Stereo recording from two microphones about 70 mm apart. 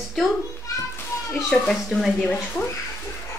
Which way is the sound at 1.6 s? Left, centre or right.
Centre.